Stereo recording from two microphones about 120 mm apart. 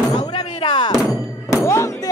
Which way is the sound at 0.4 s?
50° left (ahead or behind).